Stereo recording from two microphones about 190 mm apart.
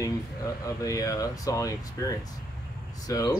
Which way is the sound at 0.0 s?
15° left (ahead or behind).